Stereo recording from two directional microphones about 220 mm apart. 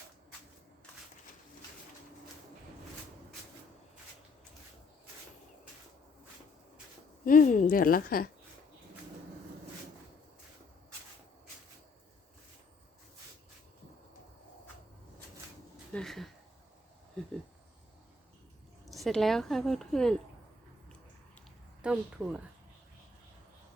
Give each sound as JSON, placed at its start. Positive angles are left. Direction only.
{"t": 7.3, "sound": "a woman's voice", "side_deg": 35}
{"t": 15.9, "sound": "speech", "side_deg": 5}
{"t": 17.2, "sound": "a sound", "side_deg": 5}
{"t": 18.9, "sound": "a woman's voice", "side_deg": 0}
{"t": 21.8, "sound": "a woman's voice", "side_deg": -5}